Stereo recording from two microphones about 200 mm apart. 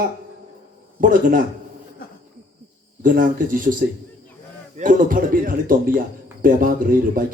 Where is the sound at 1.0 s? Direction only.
45° right (ahead or behind).